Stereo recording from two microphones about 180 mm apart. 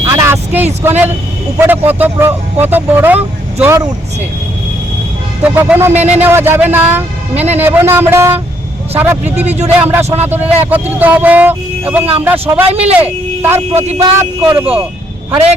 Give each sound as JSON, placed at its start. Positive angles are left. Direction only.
{"t": 0.0, "sound": "vehicle", "side_deg": -15}
{"t": 1.5, "sound": "speech", "side_deg": -10}
{"t": 5.4, "sound": "speech", "side_deg": -10}
{"t": 7.3, "sound": "speech", "side_deg": -35}
{"t": 7.6, "sound": "speech", "side_deg": -10}
{"t": 9.4, "sound": "speech", "side_deg": -35}
{"t": 9.6, "sound": "speech", "side_deg": -10}
{"t": 12.7, "sound": "speech", "side_deg": -35}
{"t": 13.4, "sound": "speech", "side_deg": -15}